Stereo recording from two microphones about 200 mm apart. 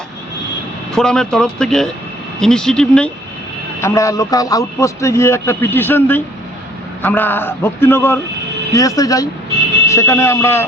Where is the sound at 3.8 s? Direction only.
15° left (ahead or behind).